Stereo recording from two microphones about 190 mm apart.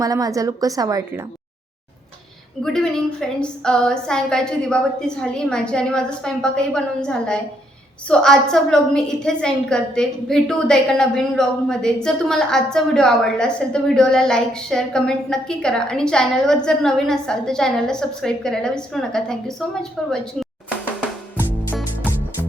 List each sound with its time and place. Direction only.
0.0 s a woman's voice: 20° right (ahead or behind)
2.6 s a woman's voice: 5° left (ahead or behind)
21.3 s music: 10° left (ahead or behind)
21.8 s music: 10° right (ahead or behind)